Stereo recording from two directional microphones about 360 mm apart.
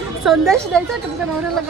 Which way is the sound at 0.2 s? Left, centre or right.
Centre.